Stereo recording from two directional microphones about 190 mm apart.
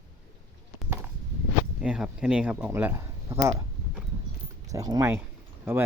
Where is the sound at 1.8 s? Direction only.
5° right (ahead or behind).